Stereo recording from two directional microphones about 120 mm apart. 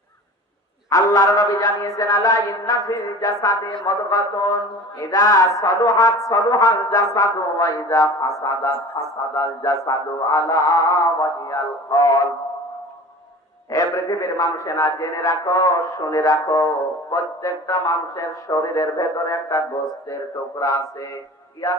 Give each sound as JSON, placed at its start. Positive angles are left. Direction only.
{"t": 0.8, "sound": "a man's voice", "side_deg": 30}
{"t": 3.7, "sound": "mantra", "side_deg": 30}
{"t": 7.2, "sound": "a man's voice", "side_deg": 30}
{"t": 13.7, "sound": "a man's voice", "side_deg": 30}